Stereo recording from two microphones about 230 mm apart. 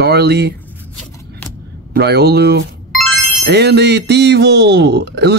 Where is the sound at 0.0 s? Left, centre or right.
Right.